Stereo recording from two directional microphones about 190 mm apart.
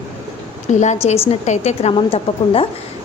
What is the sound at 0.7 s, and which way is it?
A woman's voice, 40° left (ahead or behind).